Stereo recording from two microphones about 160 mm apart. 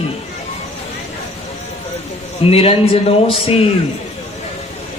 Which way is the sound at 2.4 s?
35° left (ahead or behind).